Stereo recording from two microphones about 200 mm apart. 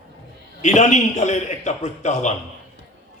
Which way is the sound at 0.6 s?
35° left (ahead or behind).